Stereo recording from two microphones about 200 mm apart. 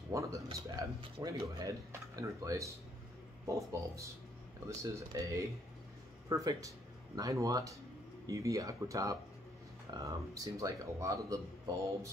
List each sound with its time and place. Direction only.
0.1 s speech: 15° right (ahead or behind)